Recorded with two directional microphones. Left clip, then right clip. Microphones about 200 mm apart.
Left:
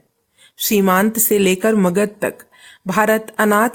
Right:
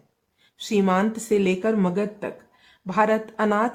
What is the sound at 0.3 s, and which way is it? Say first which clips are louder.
Speech: left 6 dB; 35° left (ahead or behind).